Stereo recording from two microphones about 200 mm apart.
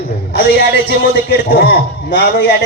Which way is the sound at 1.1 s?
50° left (ahead or behind).